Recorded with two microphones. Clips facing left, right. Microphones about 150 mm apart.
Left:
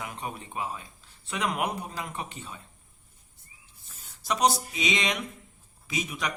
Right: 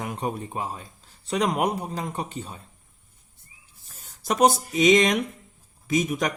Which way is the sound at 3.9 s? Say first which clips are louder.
Right 3 dB; 50° right (ahead or behind).